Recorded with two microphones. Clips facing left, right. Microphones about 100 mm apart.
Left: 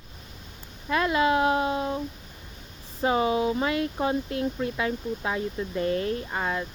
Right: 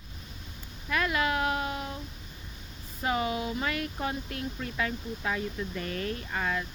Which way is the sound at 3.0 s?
25° left (ahead or behind).